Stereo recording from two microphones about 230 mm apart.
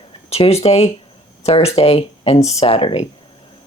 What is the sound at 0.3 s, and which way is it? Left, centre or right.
Speech, left.